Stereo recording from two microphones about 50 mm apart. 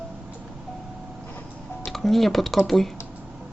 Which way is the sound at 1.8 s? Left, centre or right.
Centre.